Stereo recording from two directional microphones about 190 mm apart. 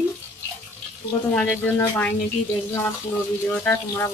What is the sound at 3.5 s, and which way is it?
Speech, 10° left (ahead or behind).